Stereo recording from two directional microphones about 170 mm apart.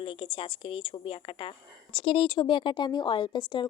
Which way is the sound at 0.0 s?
30° left (ahead or behind).